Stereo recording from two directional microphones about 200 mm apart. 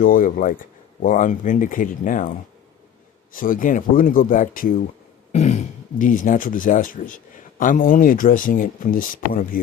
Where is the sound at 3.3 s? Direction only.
45° left (ahead or behind).